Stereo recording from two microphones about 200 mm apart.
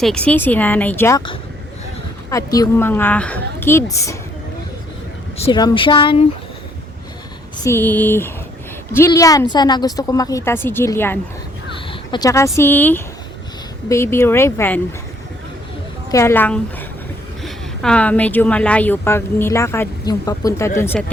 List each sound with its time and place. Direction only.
0.0 s a woman's voice: 5° left (ahead or behind)
2.3 s a woman's voice: 15° left (ahead or behind)
5.5 s speech: 20° left (ahead or behind)
7.6 s a woman's voice: 10° left (ahead or behind)
11.9 s a sound: 20° left (ahead or behind)
12.5 s a woman's voice: 10° left (ahead or behind)
16.1 s a woman's voice: 10° left (ahead or behind)